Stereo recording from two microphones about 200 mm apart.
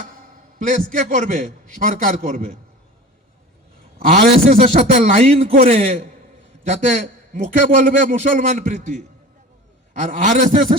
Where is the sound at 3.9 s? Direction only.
40° right (ahead or behind).